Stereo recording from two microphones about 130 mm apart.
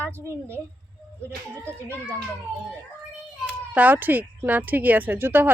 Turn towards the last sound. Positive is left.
turn(degrees=-15)  # may be behind; listen again after turning